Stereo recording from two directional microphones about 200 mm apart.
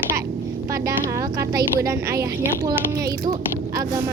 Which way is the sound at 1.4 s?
15° right (ahead or behind).